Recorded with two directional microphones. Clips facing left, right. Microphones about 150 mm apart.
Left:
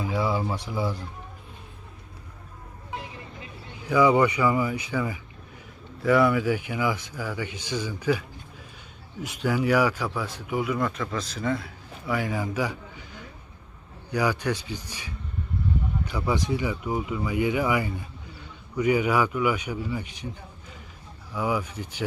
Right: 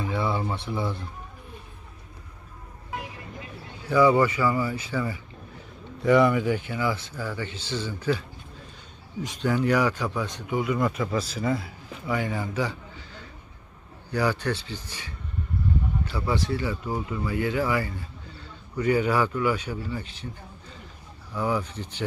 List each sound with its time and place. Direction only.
0.0 s speech: 10° left (ahead or behind)
3.8 s speech: 15° left (ahead or behind)
6.0 s speech: centre (ahead or behind)
9.2 s speech: 10° left (ahead or behind)
21.3 s speech: 10° left (ahead or behind)